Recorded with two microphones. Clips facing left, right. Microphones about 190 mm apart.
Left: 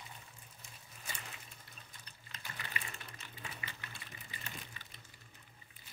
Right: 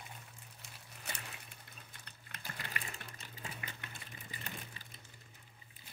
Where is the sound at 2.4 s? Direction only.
45° right (ahead or behind).